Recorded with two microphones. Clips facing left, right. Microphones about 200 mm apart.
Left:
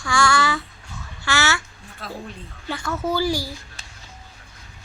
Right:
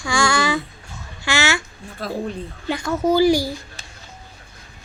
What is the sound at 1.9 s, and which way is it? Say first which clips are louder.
Speech: right 8 dB; 40° right (ahead or behind).